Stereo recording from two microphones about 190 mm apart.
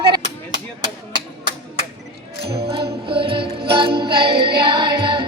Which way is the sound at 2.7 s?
30° right (ahead or behind).